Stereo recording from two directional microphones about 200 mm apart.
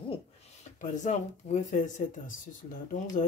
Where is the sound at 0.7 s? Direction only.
35° left (ahead or behind).